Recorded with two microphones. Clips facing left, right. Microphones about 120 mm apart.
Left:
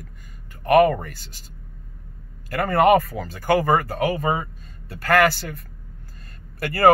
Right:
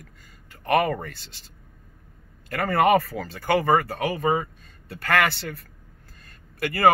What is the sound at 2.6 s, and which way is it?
Speech, 25° left (ahead or behind).